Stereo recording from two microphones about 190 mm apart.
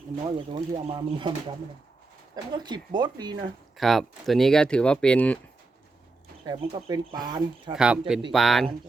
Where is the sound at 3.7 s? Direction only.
Centre (ahead or behind).